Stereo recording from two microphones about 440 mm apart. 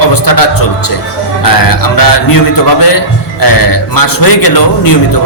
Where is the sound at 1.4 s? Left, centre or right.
Left.